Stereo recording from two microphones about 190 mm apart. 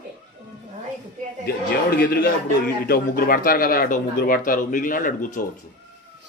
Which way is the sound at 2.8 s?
50° left (ahead or behind).